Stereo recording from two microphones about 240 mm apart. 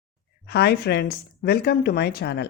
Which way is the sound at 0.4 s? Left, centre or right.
Left.